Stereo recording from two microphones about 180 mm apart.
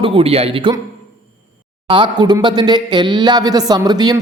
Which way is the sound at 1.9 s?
25° right (ahead or behind).